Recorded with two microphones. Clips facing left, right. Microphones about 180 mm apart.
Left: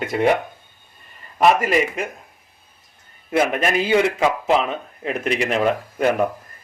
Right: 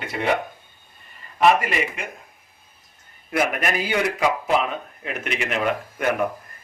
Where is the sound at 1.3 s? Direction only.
40° left (ahead or behind).